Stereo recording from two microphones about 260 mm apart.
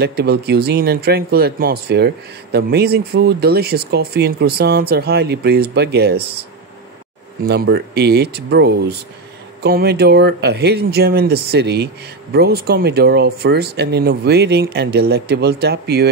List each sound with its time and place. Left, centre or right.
0.0 s speech: right
7.4 s speech: right